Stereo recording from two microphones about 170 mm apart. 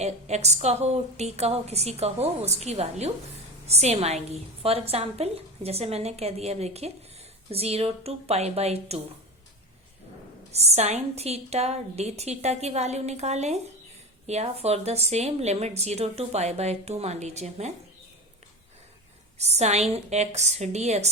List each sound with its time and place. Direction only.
0.0 s a woman's voice: 40° right (ahead or behind)
10.5 s a woman's voice: 40° right (ahead or behind)
19.4 s a woman's voice: 40° right (ahead or behind)